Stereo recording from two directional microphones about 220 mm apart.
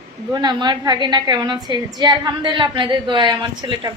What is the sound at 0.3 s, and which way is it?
A woman's voice, 20° right (ahead or behind).